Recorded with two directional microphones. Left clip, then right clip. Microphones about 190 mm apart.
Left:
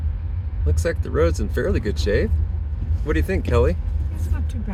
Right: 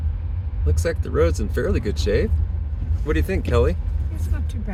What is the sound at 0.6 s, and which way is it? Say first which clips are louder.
Speech: even; centre (ahead or behind).